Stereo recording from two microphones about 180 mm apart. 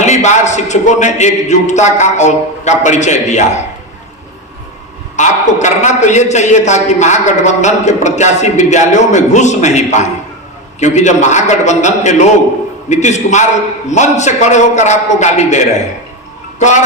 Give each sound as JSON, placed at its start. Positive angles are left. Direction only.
{"t": 0.0, "sound": "a man's voice", "side_deg": 40}
{"t": 5.1, "sound": "a man's voice", "side_deg": 40}